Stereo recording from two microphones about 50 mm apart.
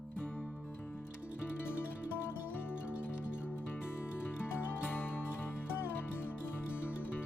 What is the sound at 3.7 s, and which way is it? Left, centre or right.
Music, left.